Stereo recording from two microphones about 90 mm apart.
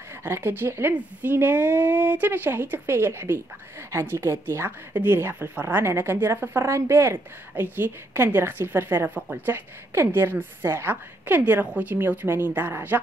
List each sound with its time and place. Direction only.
0.2 s a woman's voice: 25° right (ahead or behind)